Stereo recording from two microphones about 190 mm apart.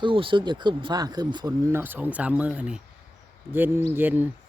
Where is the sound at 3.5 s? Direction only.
10° right (ahead or behind).